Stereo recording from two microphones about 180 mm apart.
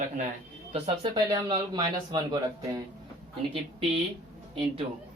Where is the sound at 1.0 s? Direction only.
25° right (ahead or behind).